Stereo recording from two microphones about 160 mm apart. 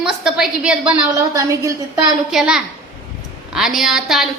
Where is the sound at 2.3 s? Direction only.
5° right (ahead or behind).